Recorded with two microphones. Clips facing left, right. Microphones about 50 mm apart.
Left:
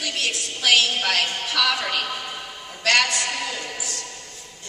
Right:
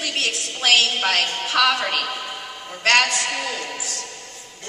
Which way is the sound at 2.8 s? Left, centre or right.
Right.